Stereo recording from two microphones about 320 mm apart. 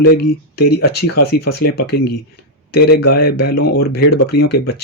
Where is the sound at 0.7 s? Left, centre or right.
Left.